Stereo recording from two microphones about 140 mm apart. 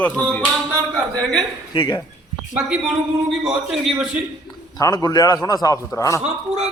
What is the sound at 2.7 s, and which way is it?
A man's voice, 5° right (ahead or behind).